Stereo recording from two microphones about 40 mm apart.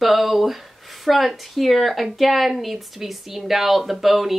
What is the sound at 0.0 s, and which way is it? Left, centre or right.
A woman's voice, centre.